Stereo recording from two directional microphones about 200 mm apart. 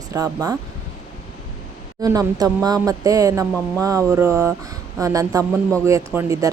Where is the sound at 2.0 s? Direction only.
20° right (ahead or behind).